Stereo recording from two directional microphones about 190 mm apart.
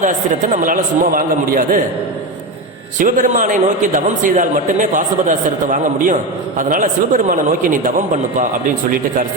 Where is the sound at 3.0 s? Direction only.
45° right (ahead or behind).